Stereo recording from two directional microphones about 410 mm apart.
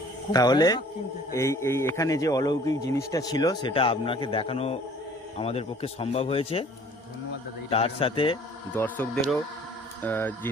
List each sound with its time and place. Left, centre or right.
0.3 s speech: centre
7.7 s speech: centre